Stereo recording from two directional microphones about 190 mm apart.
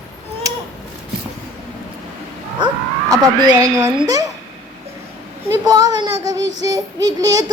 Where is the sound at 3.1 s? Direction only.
20° right (ahead or behind).